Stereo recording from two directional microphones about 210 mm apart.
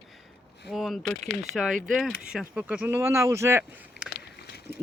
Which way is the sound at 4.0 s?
55° left (ahead or behind).